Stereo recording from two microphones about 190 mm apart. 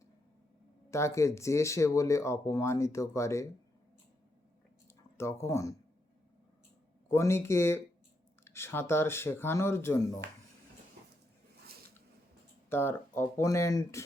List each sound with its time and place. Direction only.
0.9 s speech: 15° left (ahead or behind)
5.1 s speech: 15° left (ahead or behind)
7.1 s speech: 15° left (ahead or behind)
12.7 s speech: 10° left (ahead or behind)